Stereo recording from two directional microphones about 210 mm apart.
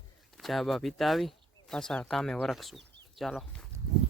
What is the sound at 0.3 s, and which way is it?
Speech, centre (ahead or behind).